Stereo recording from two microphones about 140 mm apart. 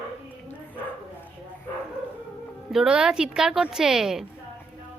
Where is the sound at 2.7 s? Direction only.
5° right (ahead or behind).